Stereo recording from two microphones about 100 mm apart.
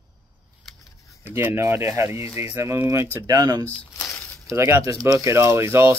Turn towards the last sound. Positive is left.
turn(degrees=-25)  # may be behind; listen again after turning